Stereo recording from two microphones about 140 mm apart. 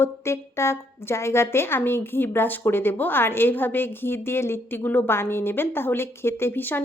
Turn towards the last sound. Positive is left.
turn(degrees=15)  # may be behind; listen again after turning